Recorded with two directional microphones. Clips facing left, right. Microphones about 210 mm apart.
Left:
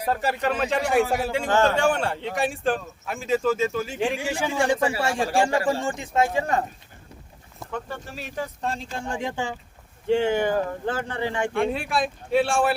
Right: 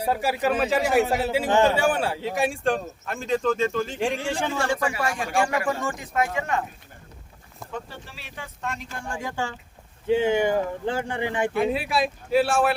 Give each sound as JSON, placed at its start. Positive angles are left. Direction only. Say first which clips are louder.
{"t": 0.0, "sound": "speech", "louder": "right 1 dB", "side_deg": -10}
{"t": 1.5, "sound": "speech", "louder": "even", "side_deg": -15}
{"t": 7.9, "sound": "speech", "louder": "left 7 dB", "side_deg": 45}
{"t": 10.1, "sound": "speech", "louder": "even", "side_deg": -10}
{"t": 11.4, "sound": "speech", "louder": "right 2 dB", "side_deg": -5}